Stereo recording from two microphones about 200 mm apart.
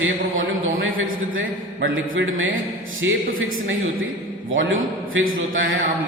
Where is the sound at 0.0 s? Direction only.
75° right (ahead or behind).